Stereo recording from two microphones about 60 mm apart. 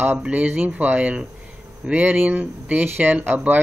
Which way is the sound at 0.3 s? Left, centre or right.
Right.